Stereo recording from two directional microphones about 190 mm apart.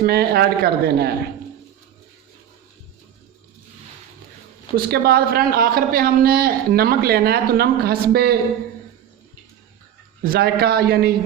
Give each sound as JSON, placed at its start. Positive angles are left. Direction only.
{"t": 0.0, "sound": "speech", "side_deg": -55}
{"t": 4.9, "sound": "a man's voice", "side_deg": -55}
{"t": 10.2, "sound": "a man's voice", "side_deg": -50}